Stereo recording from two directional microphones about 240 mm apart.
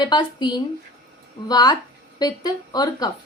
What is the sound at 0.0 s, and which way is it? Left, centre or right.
A woman's voice, centre.